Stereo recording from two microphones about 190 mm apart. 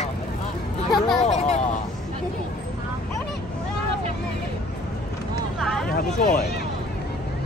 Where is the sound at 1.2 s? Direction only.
35° left (ahead or behind).